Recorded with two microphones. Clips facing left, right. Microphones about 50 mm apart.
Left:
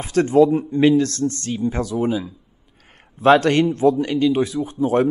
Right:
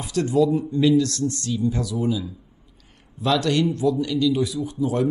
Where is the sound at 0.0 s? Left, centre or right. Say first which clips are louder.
Left 5 dB; left.